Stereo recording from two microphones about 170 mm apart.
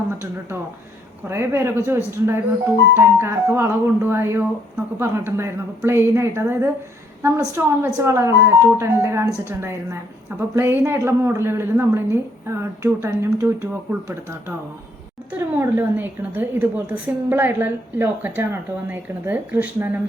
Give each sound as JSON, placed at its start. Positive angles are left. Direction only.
{"t": 1.3, "sound": "a woman's voice", "side_deg": -15}
{"t": 15.3, "sound": "a woman's voice", "side_deg": -15}